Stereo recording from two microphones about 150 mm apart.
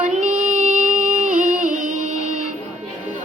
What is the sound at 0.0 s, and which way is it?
Music, 50° right (ahead or behind).